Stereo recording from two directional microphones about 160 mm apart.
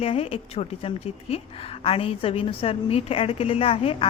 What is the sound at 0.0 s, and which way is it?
A woman's voice, 40° left (ahead or behind).